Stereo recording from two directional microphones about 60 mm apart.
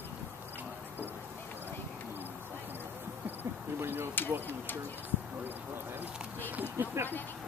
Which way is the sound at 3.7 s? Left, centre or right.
Right.